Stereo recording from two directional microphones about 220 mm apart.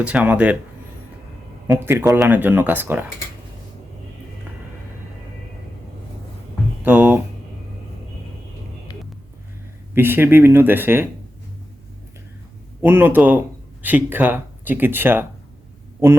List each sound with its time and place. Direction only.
0.0 s speech: 5° right (ahead or behind)
1.6 s speech: 10° right (ahead or behind)
6.8 s music: 10° right (ahead or behind)
9.9 s speech: 10° right (ahead or behind)
12.8 s speech: 10° right (ahead or behind)